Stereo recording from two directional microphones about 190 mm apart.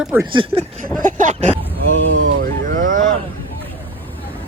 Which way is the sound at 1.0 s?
40° right (ahead or behind).